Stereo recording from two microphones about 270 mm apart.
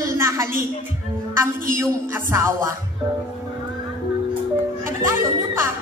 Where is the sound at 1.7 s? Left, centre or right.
Centre.